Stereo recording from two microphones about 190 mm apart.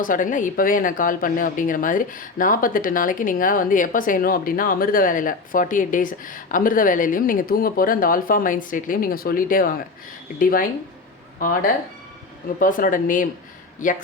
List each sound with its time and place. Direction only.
0.0 s speech: 45° left (ahead or behind)